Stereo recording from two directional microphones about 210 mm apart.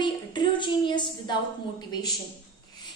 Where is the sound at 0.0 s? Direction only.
20° left (ahead or behind).